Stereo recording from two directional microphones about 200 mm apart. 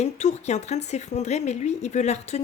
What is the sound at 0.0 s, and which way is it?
Speech, 35° left (ahead or behind).